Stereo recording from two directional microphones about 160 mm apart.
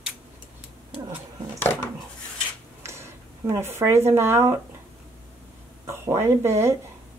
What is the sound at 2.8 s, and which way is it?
Speech, 15° right (ahead or behind).